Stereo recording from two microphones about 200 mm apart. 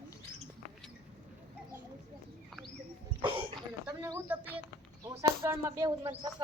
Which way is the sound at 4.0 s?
10° right (ahead or behind).